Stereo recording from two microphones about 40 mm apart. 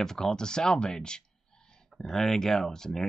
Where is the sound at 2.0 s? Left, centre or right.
Centre.